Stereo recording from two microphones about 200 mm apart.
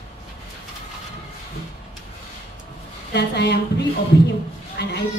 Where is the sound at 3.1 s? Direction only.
55° left (ahead or behind).